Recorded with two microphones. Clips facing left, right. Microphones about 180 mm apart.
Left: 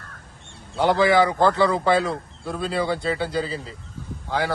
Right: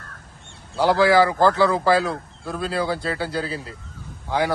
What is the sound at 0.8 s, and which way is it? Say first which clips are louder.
A man's voice: right 1 dB; centre (ahead or behind).